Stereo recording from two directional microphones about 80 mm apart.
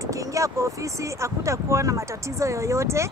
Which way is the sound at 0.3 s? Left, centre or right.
Right.